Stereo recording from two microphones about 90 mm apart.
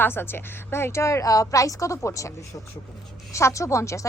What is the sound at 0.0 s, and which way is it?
A woman's voice, 25° left (ahead or behind).